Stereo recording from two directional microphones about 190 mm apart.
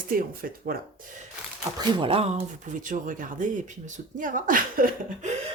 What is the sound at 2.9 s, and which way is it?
Speech, 45° right (ahead or behind).